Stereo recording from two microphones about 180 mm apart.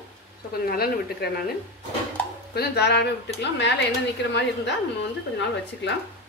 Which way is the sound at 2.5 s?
65° left (ahead or behind).